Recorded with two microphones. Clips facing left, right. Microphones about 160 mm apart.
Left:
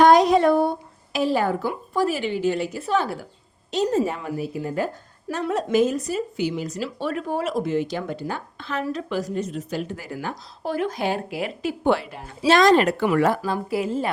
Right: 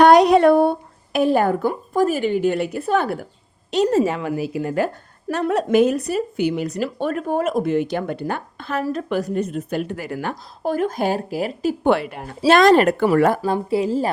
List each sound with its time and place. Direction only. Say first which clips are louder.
0.0 s speech: right 3 dB; 65° right (ahead or behind)
3.7 s a woman's voice: right 4 dB; 65° right (ahead or behind)
10.6 s a woman's voice: right 4 dB; 45° right (ahead or behind)
11.9 s a woman's voice: right 2 dB; 60° right (ahead or behind)
13.4 s a woman's voice: right 5 dB; 30° right (ahead or behind)